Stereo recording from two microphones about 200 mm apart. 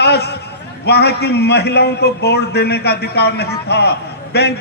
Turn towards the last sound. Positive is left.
turn(degrees=55)  # may be behind; listen again after turning